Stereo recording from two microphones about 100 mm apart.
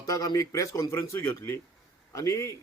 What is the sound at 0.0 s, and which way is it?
A man's voice, 35° left (ahead or behind).